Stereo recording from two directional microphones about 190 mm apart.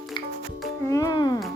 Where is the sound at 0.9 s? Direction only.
20° left (ahead or behind).